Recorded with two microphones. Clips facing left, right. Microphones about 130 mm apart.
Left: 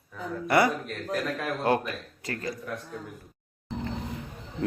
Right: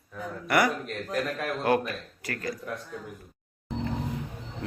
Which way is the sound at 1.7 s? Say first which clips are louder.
Right 1 dB; 25° left (ahead or behind).